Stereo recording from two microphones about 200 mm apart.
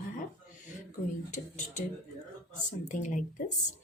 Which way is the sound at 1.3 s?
35° left (ahead or behind).